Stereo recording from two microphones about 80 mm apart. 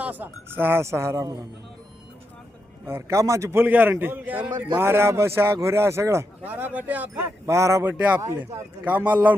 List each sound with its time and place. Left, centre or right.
0.0 s speech: right
2.8 s a man's voice: right
6.4 s a man's voice: right
7.2 s speech: right
7.9 s a man's voice: centre